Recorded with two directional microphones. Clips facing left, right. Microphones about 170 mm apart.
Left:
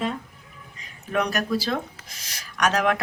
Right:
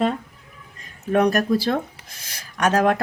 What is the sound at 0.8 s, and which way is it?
Speech, 45° right (ahead or behind).